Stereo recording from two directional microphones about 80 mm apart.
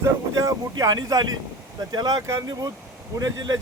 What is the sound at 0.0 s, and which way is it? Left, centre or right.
Speech, right.